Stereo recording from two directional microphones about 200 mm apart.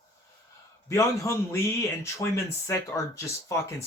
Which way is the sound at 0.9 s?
15° left (ahead or behind).